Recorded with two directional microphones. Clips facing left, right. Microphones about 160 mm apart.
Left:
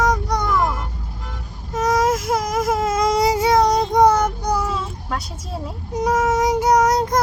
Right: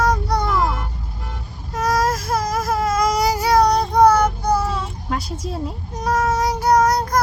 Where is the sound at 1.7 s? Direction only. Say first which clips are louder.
Left 2 dB; 20° left (ahead or behind).